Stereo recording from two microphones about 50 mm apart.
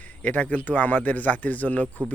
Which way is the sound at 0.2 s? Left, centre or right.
Left.